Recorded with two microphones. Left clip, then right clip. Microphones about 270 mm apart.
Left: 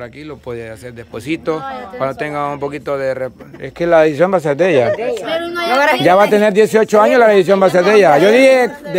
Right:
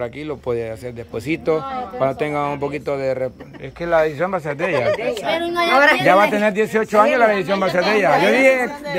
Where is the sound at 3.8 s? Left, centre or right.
Left.